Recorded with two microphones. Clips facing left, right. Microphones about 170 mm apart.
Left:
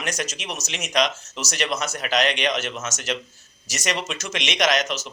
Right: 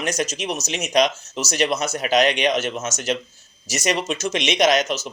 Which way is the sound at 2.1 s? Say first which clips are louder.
Right 4 dB; 5° right (ahead or behind).